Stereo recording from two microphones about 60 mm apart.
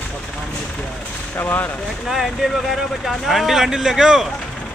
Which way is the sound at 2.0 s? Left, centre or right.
Centre.